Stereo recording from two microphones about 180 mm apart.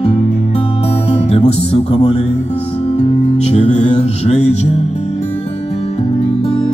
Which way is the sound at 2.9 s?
35° left (ahead or behind).